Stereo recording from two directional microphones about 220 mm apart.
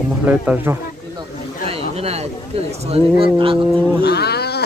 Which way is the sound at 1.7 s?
30° right (ahead or behind).